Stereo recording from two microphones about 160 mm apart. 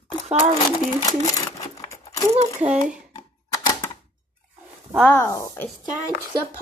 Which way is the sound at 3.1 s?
20° left (ahead or behind).